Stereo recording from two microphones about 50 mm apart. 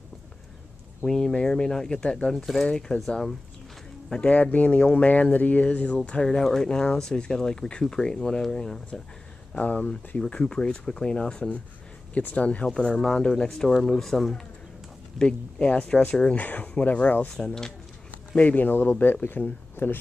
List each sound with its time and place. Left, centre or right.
1.0 s speech: centre
2.0 s speech: left
2.3 s speech: centre
4.1 s speech: left
9.5 s speech: left
12.1 s speech: left
12.7 s speech: centre
15.1 s speech: left
16.3 s speech: left
18.3 s speech: left